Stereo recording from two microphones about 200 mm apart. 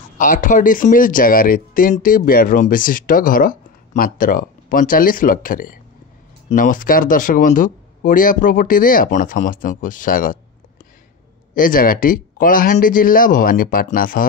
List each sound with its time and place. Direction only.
0.2 s speech: 40° left (ahead or behind)
11.5 s speech: 45° left (ahead or behind)